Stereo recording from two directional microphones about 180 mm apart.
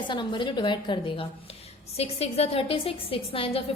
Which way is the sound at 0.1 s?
25° left (ahead or behind).